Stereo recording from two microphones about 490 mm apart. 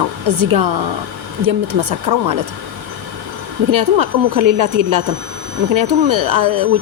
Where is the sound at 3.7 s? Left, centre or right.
Right.